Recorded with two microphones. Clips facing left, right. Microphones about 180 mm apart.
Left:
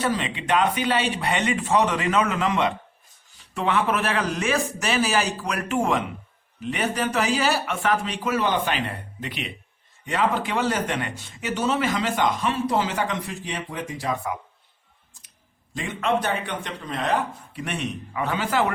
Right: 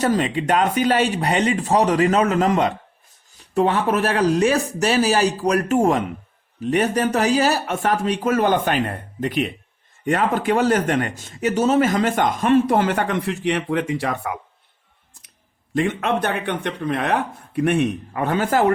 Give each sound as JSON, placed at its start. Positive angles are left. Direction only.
{"t": 0.0, "sound": "speech", "side_deg": -45}
{"t": 15.7, "sound": "speech", "side_deg": -60}